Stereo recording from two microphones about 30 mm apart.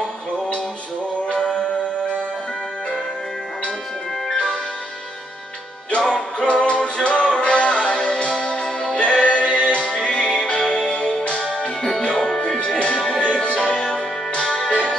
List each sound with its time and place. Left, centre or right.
1.2 s music: left
5.9 s music: left
12.5 s music: left